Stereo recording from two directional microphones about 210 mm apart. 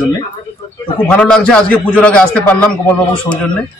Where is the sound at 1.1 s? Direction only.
5° left (ahead or behind).